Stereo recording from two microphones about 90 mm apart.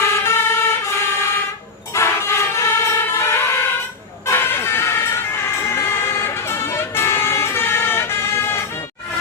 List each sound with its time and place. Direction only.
0.1 s vehicle: 30° left (ahead or behind)
1.9 s emergency vehicle: 30° left (ahead or behind)
4.3 s vehicle: 25° left (ahead or behind)